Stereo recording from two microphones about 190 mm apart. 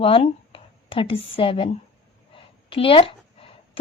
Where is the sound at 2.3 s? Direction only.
30° left (ahead or behind).